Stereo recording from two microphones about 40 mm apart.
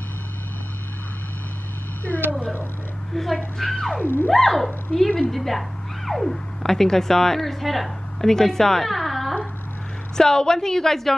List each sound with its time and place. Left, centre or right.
2.1 s a sound: left
3.5 s a woman's voice: centre
4.0 s theremin: left
4.3 s a sound: centre
4.9 s a woman's voice: left
5.3 s speech: centre
10.1 s a woman's voice: centre